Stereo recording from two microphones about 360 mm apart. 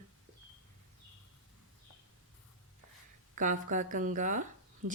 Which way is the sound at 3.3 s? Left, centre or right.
Right.